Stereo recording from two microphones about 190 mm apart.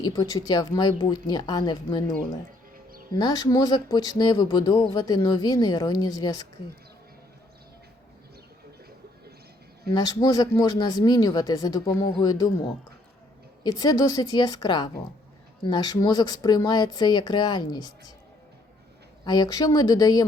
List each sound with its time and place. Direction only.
0.0 s speech: 20° left (ahead or behind)
3.2 s speech: 20° left (ahead or behind)
9.9 s speech: 20° left (ahead or behind)
19.2 s speech: 20° left (ahead or behind)